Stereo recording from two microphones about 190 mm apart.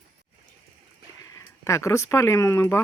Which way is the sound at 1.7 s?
15° left (ahead or behind).